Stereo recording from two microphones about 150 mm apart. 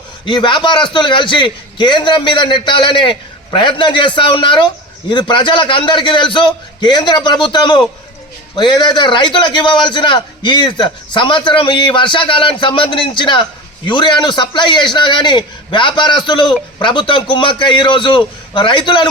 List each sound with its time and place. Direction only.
0.3 s a man's voice: 30° left (ahead or behind)